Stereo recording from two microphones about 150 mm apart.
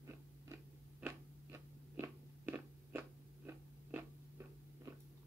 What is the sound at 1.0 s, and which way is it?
Biting, 15° right (ahead or behind).